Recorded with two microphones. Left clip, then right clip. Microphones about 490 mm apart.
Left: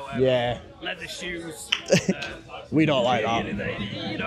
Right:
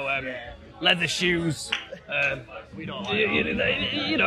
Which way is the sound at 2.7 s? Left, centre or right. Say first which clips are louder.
Left 16 dB; left.